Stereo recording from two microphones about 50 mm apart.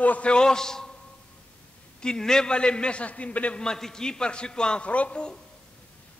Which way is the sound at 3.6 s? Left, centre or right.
Centre.